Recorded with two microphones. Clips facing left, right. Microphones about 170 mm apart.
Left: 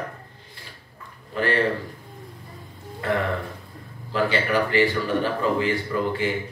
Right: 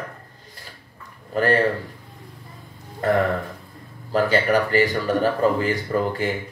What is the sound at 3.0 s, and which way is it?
Speech, 40° right (ahead or behind).